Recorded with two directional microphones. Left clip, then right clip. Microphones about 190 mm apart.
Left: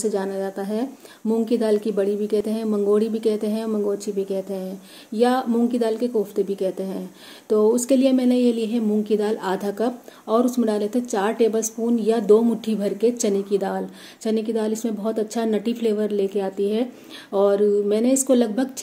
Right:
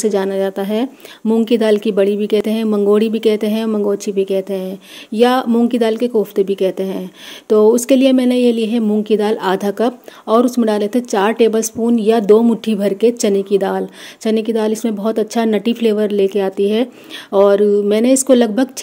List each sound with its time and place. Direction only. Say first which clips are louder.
0.0 s speech: right 8 dB; 50° right (ahead or behind)